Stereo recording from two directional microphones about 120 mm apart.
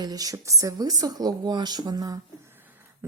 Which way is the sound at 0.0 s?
30° right (ahead or behind).